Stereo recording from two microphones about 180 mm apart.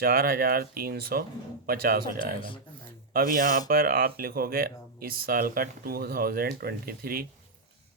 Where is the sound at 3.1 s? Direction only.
50° right (ahead or behind).